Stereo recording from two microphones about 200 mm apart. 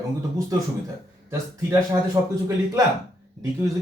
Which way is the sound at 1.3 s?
15° right (ahead or behind).